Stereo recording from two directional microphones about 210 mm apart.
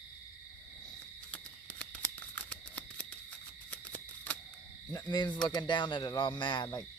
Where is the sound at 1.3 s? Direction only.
5° left (ahead or behind).